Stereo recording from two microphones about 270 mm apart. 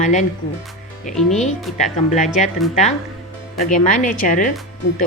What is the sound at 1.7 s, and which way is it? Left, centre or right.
Speech, left.